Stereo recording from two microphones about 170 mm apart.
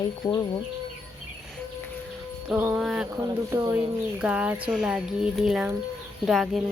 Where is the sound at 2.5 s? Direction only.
5° right (ahead or behind).